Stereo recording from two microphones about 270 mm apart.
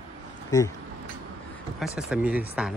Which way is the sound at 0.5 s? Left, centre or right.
Centre.